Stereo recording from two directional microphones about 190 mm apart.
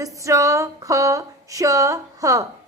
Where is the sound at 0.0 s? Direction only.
15° right (ahead or behind).